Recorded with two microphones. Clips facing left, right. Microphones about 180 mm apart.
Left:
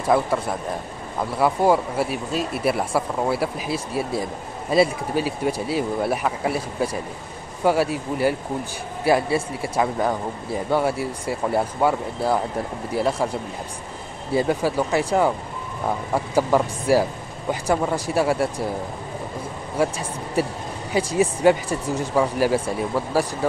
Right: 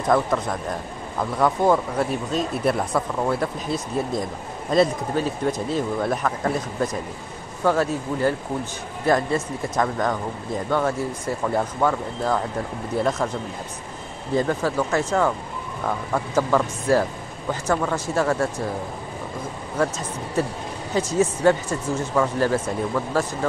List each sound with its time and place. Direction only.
0.0 s speech: 5° left (ahead or behind)
14.3 s speech: 10° left (ahead or behind)
19.8 s speech: 10° left (ahead or behind)